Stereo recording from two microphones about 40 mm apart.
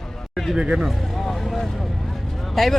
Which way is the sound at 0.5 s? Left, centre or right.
Right.